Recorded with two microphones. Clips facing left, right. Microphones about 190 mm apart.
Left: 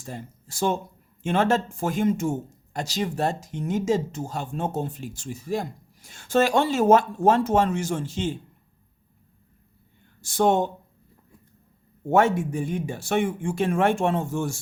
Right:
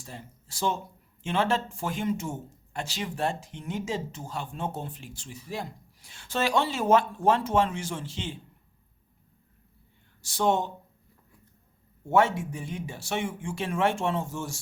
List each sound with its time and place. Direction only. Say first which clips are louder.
0.0 s speech: left 7 dB; 45° left (ahead or behind)
10.2 s speech: left 5 dB; 50° left (ahead or behind)
12.0 s speech: left 3 dB; 50° left (ahead or behind)